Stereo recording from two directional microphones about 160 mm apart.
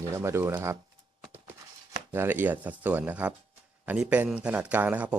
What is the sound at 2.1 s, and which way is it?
Speech, 15° right (ahead or behind).